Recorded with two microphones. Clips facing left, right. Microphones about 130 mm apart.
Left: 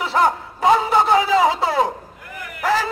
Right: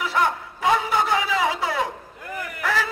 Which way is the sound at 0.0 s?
30° left (ahead or behind).